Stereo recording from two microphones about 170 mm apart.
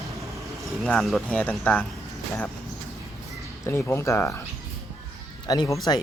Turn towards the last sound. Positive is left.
turn(degrees=20)  # may be behind; listen again after turning